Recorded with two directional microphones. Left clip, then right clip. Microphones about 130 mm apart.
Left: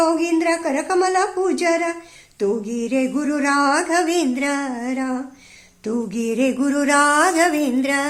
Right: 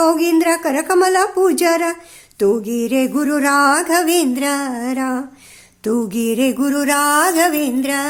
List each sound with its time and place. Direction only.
0.0 s music: 45° right (ahead or behind); by 8.0 s 15° right (ahead or behind)